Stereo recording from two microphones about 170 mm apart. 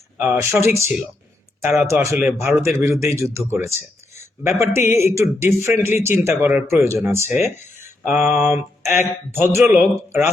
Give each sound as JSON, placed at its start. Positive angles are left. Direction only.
{"t": 0.2, "sound": "speech", "side_deg": -15}
{"t": 7.5, "sound": "a sound", "side_deg": -10}
{"t": 8.4, "sound": "speech", "side_deg": -15}